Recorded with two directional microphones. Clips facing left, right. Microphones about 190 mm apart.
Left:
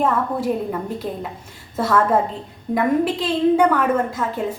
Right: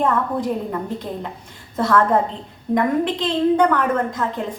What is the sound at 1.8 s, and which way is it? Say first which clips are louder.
A woman's voice: right 1 dB; 10° left (ahead or behind).